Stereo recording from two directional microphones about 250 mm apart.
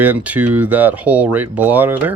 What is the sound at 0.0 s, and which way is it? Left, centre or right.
Speech, centre.